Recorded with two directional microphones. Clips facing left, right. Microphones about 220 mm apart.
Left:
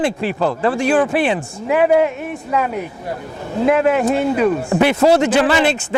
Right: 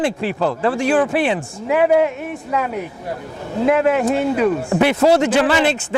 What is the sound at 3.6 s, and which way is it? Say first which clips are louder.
Speech: left 1 dB; 20° left (ahead or behind).